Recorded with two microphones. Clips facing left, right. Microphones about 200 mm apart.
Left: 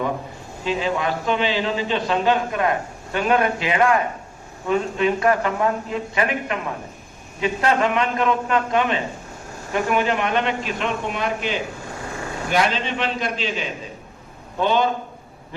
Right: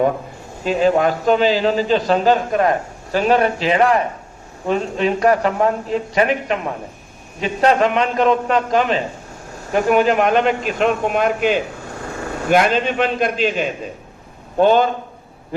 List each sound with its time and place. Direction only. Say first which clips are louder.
0.6 s a man's voice: right 7 dB; 45° right (ahead or behind)